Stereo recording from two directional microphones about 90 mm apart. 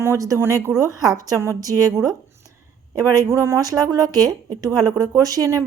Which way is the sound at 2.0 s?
40° right (ahead or behind).